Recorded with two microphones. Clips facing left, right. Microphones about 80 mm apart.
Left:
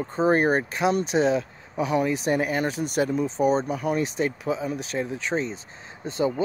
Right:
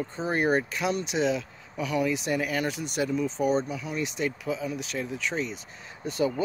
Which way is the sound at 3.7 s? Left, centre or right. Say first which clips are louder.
Left 7 dB; left.